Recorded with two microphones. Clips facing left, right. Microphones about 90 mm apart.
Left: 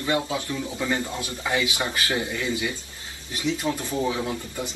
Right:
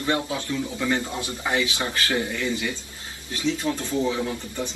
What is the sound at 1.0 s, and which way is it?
Speech, 20° right (ahead or behind).